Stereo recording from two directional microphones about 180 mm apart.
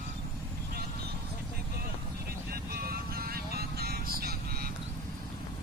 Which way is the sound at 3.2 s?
55° right (ahead or behind).